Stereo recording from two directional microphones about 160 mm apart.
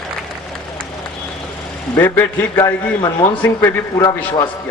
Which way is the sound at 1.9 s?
15° left (ahead or behind).